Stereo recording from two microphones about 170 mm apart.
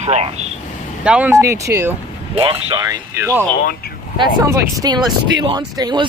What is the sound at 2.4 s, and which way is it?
Speech, 30° right (ahead or behind).